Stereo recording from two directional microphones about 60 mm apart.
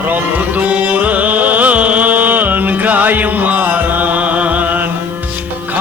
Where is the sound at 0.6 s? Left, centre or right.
Right.